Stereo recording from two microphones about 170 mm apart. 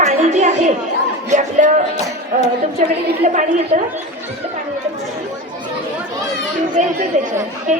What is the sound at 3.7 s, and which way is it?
Speech, 45° right (ahead or behind).